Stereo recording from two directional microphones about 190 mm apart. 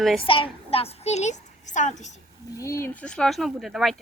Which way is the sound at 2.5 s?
15° left (ahead or behind).